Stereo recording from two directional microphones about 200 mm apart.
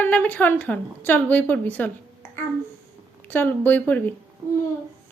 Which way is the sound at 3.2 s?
10° left (ahead or behind).